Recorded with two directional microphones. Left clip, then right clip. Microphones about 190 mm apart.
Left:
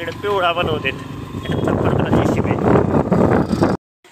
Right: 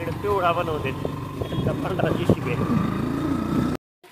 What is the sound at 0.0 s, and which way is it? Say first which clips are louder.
Speech: left 4 dB; 5° left (ahead or behind).